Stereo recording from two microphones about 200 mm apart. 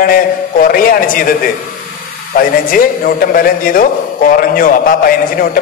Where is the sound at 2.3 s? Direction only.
45° left (ahead or behind).